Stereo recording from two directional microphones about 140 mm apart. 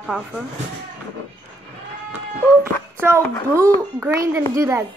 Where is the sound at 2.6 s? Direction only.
15° right (ahead or behind).